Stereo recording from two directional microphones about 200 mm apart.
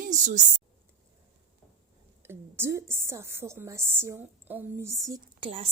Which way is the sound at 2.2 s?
10° right (ahead or behind).